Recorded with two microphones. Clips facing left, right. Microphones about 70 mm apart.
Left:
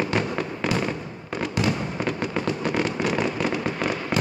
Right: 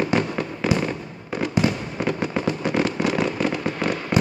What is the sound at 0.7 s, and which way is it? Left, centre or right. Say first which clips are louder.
Fireworks: right 2 dB; centre.